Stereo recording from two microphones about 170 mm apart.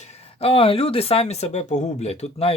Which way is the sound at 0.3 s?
35° left (ahead or behind).